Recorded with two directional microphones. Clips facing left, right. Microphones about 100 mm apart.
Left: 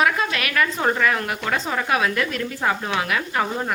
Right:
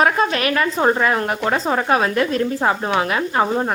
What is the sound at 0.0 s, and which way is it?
Speech, 35° right (ahead or behind).